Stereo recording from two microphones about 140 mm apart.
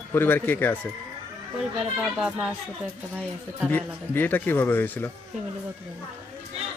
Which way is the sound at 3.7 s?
15° left (ahead or behind).